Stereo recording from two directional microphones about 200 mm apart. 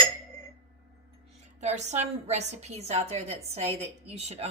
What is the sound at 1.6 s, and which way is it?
A woman's voice, 35° right (ahead or behind).